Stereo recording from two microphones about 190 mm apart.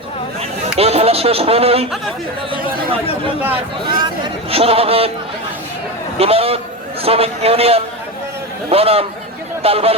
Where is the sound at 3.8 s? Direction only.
25° right (ahead or behind).